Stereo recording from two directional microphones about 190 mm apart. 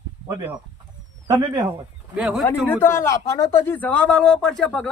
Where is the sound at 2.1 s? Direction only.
5° right (ahead or behind).